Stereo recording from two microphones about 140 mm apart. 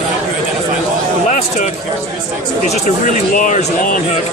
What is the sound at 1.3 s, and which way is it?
Speech, 60° left (ahead or behind).